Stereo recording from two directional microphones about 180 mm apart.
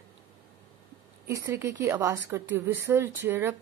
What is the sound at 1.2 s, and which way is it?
Speech, 15° right (ahead or behind).